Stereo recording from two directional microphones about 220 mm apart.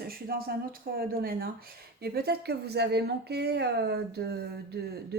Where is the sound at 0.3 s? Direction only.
40° right (ahead or behind).